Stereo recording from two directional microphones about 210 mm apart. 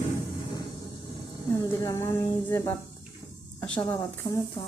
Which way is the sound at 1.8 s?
15° left (ahead or behind).